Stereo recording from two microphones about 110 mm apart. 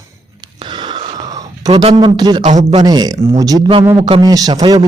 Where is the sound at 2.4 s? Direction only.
90° right.